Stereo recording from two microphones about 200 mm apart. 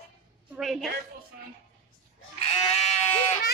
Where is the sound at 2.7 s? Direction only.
35° left (ahead or behind).